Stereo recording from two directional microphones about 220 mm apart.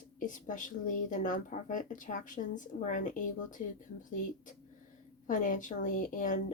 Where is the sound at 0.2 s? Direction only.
35° left (ahead or behind).